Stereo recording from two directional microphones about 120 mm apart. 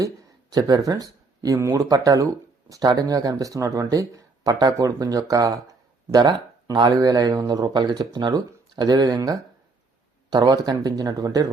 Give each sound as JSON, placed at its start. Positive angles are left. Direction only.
{"t": 0.5, "sound": "speech", "side_deg": -30}